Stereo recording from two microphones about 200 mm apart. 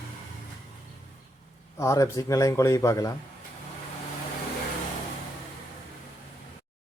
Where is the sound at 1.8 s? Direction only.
15° left (ahead or behind).